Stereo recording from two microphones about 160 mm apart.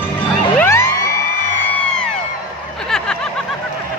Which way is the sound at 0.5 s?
15° left (ahead or behind).